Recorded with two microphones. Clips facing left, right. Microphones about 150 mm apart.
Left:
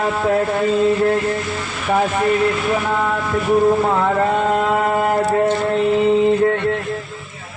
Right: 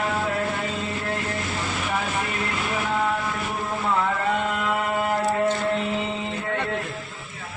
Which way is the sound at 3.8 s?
50° left (ahead or behind).